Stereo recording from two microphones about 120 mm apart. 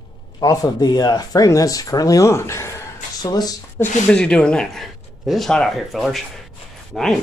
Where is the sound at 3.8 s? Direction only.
20° left (ahead or behind).